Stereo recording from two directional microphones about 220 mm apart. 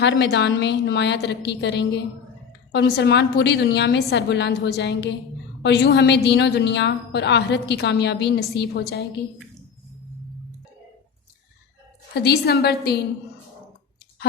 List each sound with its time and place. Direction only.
0.0 s a woman's voice: 55° left (ahead or behind)
12.1 s a woman's voice: 45° left (ahead or behind)